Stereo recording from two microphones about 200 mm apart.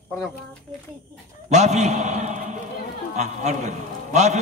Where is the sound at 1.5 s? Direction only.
35° right (ahead or behind).